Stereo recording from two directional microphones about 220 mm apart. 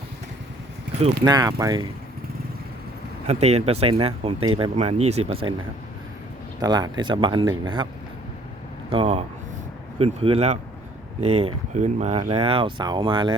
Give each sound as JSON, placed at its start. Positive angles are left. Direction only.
{"t": 1.2, "sound": "speech", "side_deg": -15}
{"t": 3.2, "sound": "speech", "side_deg": -30}
{"t": 6.6, "sound": "speech", "side_deg": -15}
{"t": 8.9, "sound": "speech", "side_deg": -25}